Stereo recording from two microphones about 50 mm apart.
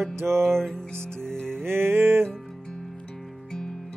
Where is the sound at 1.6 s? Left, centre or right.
Right.